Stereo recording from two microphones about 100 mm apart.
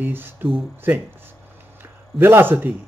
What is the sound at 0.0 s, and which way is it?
Speech, 20° right (ahead or behind).